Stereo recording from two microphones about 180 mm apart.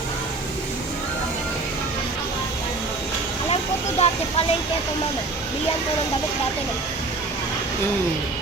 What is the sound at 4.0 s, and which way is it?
Speech, 35° left (ahead or behind).